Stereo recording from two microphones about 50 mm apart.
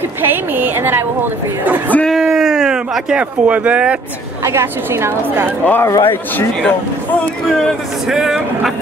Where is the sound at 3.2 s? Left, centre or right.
Right.